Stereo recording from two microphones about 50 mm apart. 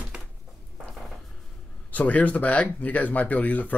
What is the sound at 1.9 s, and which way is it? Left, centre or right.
Speech, left.